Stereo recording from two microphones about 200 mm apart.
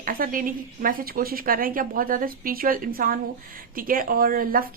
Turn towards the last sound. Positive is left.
turn(degrees=-45)  # may be behind; listen again after turning